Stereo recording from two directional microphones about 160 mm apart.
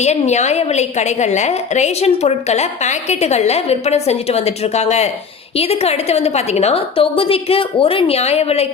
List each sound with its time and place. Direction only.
0.0 s a woman's voice: 45° left (ahead or behind)